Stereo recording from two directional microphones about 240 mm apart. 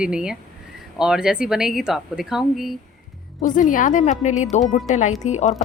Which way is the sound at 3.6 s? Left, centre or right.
Left.